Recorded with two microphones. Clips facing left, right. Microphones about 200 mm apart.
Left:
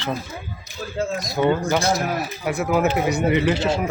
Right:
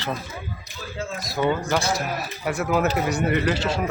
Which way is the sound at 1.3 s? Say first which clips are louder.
Left 3 dB; 15° left (ahead or behind).